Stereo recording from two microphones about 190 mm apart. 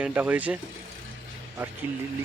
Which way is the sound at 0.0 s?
10° right (ahead or behind).